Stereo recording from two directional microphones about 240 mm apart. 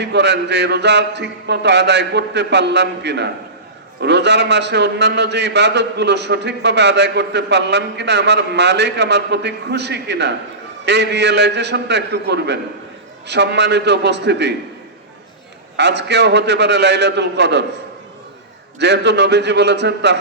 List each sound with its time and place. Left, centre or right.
0.0 s a man's voice: right
15.7 s a man's voice: right
18.8 s a man's voice: right